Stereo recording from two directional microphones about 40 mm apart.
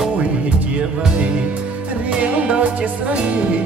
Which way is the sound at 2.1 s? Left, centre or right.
Right.